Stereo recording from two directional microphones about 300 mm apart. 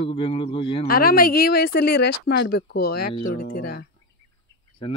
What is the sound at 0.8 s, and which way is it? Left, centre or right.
Speech, left.